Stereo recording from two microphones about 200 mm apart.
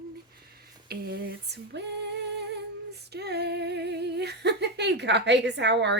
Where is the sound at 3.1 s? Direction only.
55° right (ahead or behind).